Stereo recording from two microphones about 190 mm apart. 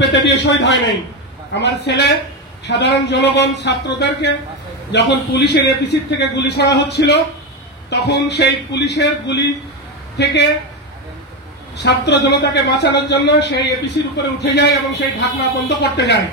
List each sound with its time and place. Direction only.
0.1 s a man's voice: 70° left (ahead or behind)
11.7 s a man's voice: 60° left (ahead or behind)